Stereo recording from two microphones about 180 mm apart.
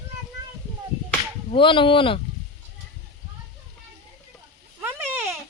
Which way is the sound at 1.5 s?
30° left (ahead or behind).